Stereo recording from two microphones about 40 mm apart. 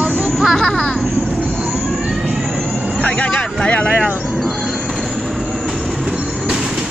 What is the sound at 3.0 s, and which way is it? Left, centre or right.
Vehicle, left.